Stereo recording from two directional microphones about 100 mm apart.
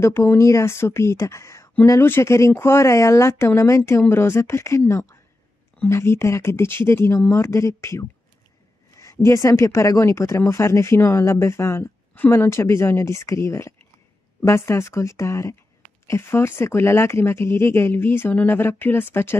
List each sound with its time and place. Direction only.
0.0 s speech: 25° left (ahead or behind)
9.0 s speech: 30° left (ahead or behind)